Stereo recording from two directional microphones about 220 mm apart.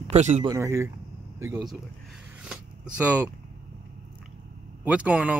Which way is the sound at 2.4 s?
5° right (ahead or behind).